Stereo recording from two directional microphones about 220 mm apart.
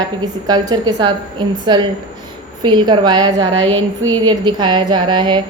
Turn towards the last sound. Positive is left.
turn(degrees=-20)  # may be behind; listen again after turning